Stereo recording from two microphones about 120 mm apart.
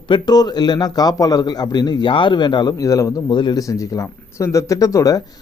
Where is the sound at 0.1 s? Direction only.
35° left (ahead or behind).